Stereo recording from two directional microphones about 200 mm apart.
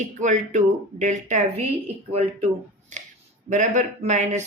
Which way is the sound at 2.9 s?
35° right (ahead or behind).